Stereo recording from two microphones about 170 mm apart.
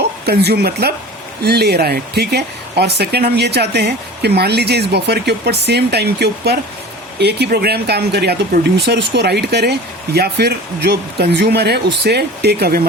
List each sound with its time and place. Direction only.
0.3 s speech: 70° right (ahead or behind)